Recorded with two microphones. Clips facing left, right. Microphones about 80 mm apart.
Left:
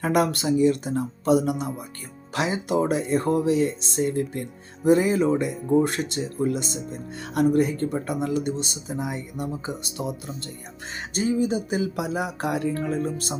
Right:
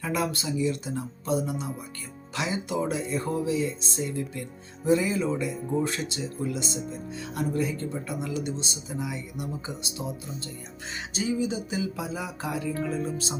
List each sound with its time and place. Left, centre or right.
0.0 s speech: left
1.3 s speech: left
2.3 s speech: left
10.0 s speech: left
11.1 s speech: left